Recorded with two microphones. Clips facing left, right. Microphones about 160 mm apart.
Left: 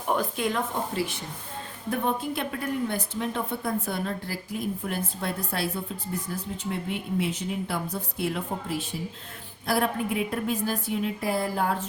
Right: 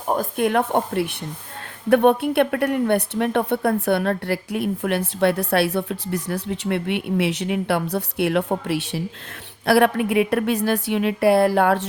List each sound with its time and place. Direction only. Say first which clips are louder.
0.1 s speech: right 6 dB; 50° right (ahead or behind); by 11.9 s 75° right (ahead or behind)